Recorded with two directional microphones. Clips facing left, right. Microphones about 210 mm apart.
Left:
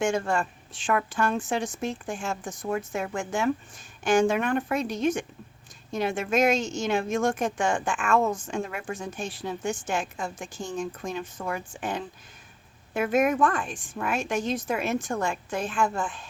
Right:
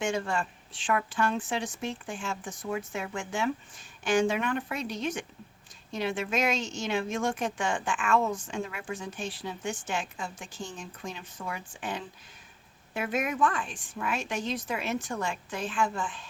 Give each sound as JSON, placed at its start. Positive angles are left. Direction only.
{"t": 0.0, "sound": "a woman's voice", "side_deg": 45}